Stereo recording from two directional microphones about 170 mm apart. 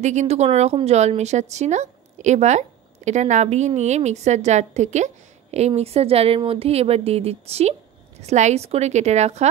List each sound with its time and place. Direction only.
0.0 s a woman's voice: 45° right (ahead or behind)